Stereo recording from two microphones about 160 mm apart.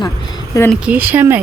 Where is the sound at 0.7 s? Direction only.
10° right (ahead or behind).